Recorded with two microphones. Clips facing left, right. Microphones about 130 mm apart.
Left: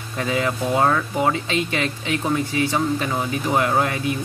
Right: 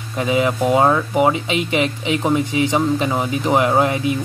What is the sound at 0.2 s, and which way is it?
Speech, 15° right (ahead or behind).